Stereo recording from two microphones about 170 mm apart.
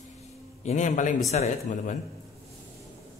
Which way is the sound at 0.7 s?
45° left (ahead or behind).